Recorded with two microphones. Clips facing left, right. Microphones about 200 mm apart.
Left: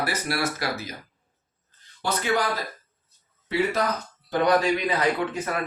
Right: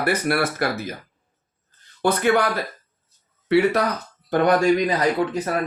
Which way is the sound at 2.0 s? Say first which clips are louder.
Right 6 dB; 55° right (ahead or behind).